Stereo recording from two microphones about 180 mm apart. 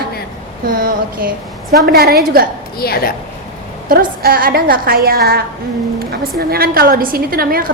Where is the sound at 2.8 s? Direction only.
55° left (ahead or behind).